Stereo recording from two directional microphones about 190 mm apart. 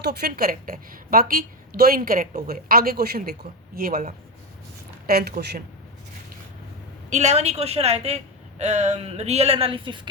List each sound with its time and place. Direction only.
0.0 s a woman's voice: 60° right (ahead or behind)
7.1 s a woman's voice: 35° right (ahead or behind)